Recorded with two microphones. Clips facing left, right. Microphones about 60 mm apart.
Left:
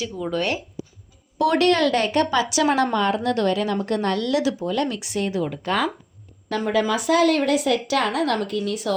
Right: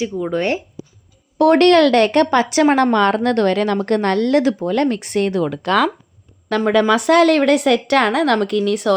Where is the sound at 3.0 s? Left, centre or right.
Right.